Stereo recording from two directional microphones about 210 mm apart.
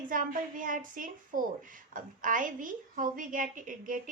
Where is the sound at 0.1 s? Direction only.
40° right (ahead or behind).